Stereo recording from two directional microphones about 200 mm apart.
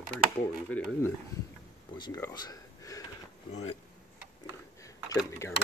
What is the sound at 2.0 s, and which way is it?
Speech, 20° left (ahead or behind).